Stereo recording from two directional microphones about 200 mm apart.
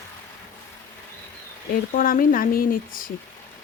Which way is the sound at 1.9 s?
45° left (ahead or behind).